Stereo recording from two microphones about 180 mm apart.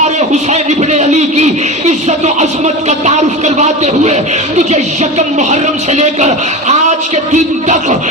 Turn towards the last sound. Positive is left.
turn(degrees=-40)  # may be behind; listen again after turning